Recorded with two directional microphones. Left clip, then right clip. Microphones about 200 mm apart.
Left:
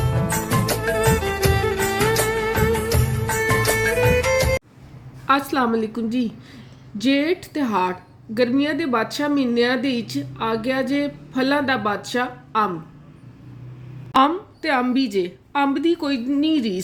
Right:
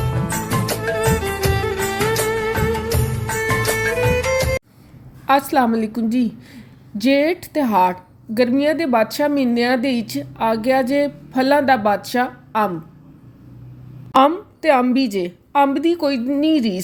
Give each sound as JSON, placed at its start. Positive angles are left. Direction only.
{"t": 0.0, "sound": "music", "side_deg": 0}
{"t": 5.2, "sound": "a woman's voice", "side_deg": -35}
{"t": 14.2, "sound": "a woman's voice", "side_deg": -30}